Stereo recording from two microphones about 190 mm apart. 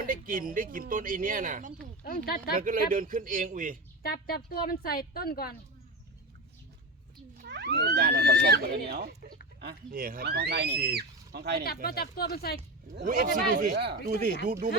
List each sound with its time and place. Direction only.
0.0 s speech: 45° right (ahead or behind)
2.0 s a woman's voice: 50° left (ahead or behind)
2.6 s speech: 45° right (ahead or behind)
4.0 s a woman's voice: 55° left (ahead or behind)
7.4 s speech: 60° right (ahead or behind)
11.6 s a woman's voice: 55° left (ahead or behind)
13.1 s speech: 45° right (ahead or behind)